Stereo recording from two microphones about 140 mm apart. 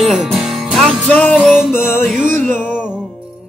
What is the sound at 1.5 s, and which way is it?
Music, 5° right (ahead or behind).